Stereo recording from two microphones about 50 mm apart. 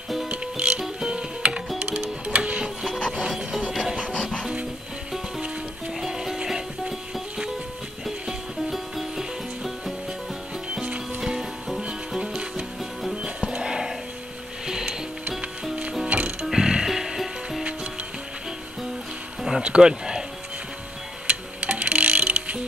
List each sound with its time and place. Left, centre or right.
0.3 s music: right
2.6 s rub: centre
3.1 s music: centre
5.9 s music: centre
8.7 s music: centre
10.7 s music: right
11.1 s music: centre
12.2 s music: right
16.1 s music: right
16.5 s music: centre
19.6 s a sound: centre
21.3 s music: right